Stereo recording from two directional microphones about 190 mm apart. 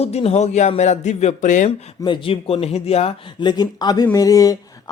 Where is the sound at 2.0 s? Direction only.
25° left (ahead or behind).